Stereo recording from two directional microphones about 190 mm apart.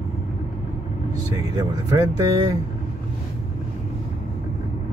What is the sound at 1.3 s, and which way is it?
Speech, 20° right (ahead or behind).